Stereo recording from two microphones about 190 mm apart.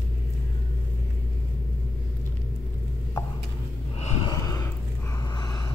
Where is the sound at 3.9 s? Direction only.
35° left (ahead or behind).